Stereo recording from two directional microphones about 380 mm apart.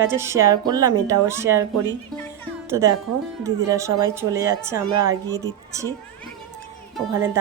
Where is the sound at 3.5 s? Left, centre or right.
Centre.